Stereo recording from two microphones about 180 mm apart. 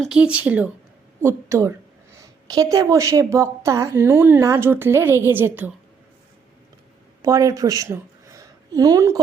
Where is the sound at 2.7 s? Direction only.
20° right (ahead or behind).